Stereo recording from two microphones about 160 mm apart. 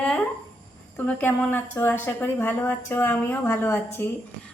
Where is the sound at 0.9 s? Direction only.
10° left (ahead or behind).